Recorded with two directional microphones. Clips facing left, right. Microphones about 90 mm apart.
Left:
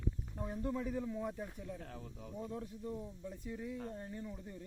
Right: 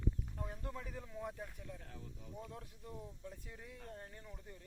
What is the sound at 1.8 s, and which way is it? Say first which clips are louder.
Speech: left 5 dB; 70° left (ahead or behind).